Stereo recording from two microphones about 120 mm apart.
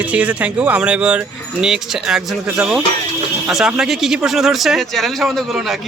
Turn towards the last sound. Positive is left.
turn(degrees=0)  # may be behind; listen again after turning